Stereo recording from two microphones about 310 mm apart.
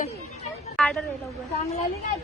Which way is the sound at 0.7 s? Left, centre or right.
Centre.